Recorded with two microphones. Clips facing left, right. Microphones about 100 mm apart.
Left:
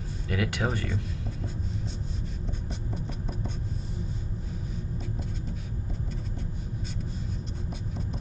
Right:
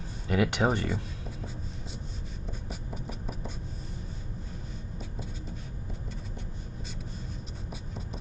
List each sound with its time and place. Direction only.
0.3 s speech: 20° right (ahead or behind)